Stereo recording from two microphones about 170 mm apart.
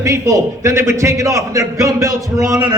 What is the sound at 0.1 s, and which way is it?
A man's voice, 20° right (ahead or behind).